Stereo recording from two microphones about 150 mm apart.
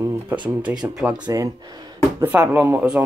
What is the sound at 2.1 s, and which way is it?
Speech, 10° right (ahead or behind).